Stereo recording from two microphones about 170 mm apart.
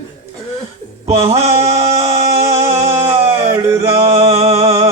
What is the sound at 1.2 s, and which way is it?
Music, 35° right (ahead or behind).